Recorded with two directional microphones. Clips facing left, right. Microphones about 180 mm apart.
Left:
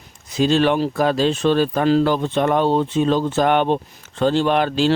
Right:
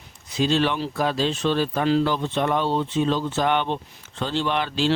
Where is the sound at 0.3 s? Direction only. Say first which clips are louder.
Left 5 dB; 45° left (ahead or behind).